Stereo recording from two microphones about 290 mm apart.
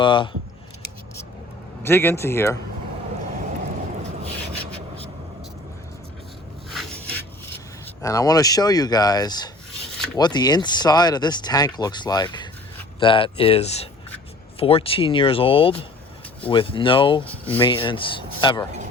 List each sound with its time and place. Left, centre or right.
0.0 s speech: centre
1.8 s speech: centre
6.7 s a sound: centre
8.0 s speech: centre
17.2 s speech: centre
17.6 s speech: centre